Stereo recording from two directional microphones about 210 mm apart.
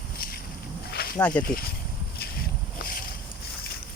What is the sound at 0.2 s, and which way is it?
Walk, 45° left (ahead or behind).